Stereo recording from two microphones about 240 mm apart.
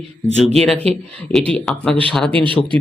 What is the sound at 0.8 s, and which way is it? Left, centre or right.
Speech, right.